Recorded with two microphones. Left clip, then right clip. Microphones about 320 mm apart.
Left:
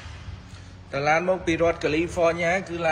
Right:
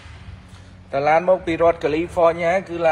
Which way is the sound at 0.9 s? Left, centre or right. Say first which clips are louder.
Right 6 dB; centre.